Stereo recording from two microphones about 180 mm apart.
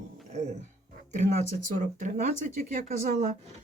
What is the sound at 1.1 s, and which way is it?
Speech, 40° right (ahead or behind).